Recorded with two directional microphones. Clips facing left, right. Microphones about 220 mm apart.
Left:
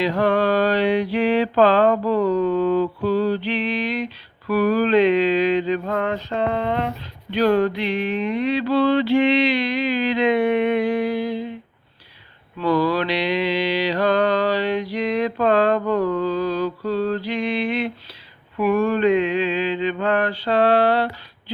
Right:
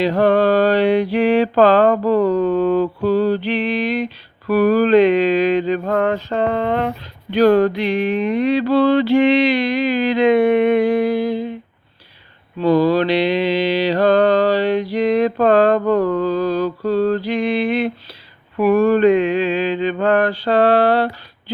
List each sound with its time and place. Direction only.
0.0 s mantra: 35° right (ahead or behind)
12.5 s mantra: 25° right (ahead or behind); by 21.1 s 40° right (ahead or behind)